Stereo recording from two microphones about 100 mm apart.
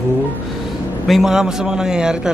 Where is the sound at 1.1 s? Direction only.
5° right (ahead or behind).